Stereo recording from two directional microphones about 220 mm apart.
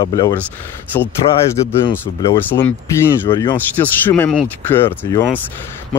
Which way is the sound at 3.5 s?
10° left (ahead or behind).